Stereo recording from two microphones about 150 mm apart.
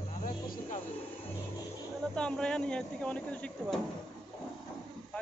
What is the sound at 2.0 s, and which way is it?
Speech, 5° left (ahead or behind).